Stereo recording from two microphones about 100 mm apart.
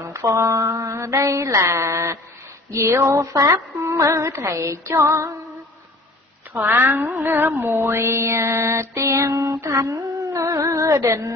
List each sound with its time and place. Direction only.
0.1 s mantra: 30° right (ahead or behind)
2.7 s music: 30° right (ahead or behind)
6.5 s music: 30° right (ahead or behind)